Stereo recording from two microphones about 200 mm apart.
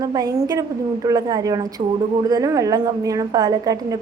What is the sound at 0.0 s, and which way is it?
A woman's voice, 20° right (ahead or behind).